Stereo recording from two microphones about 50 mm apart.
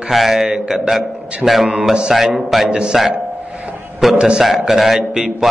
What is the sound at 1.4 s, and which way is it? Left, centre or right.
A man's voice, centre.